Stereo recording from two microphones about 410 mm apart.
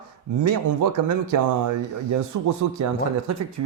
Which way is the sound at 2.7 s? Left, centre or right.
Right.